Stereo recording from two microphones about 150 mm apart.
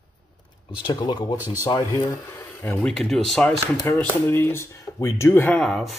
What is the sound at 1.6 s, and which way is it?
Speech, 25° left (ahead or behind).